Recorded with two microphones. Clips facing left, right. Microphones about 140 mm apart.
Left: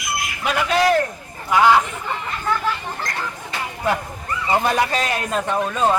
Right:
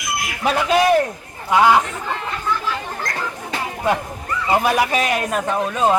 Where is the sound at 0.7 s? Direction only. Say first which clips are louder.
Right 2 dB; 15° right (ahead or behind).